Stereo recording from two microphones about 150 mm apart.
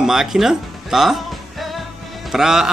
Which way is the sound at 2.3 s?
5° right (ahead or behind).